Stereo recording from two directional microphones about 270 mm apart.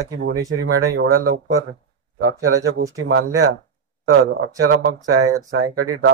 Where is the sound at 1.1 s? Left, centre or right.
Right.